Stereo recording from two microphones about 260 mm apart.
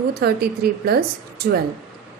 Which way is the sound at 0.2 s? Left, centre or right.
Right.